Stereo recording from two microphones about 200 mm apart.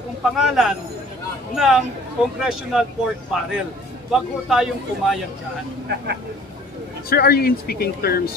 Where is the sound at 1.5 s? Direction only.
Centre (ahead or behind).